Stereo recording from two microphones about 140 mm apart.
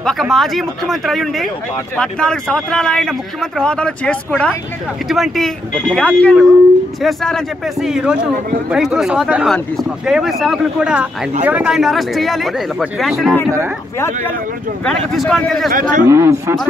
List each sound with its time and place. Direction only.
0.0 s speech: centre (ahead or behind)
13.9 s speech: 20° left (ahead or behind)
14.9 s speech: 5° left (ahead or behind)
15.7 s a man's voice: 75° right (ahead or behind)
16.1 s speech: 20° right (ahead or behind)